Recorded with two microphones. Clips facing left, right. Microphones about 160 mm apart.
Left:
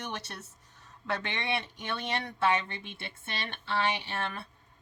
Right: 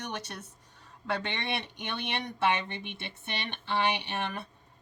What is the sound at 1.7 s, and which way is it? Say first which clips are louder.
Speech: left 1 dB; 20° right (ahead or behind).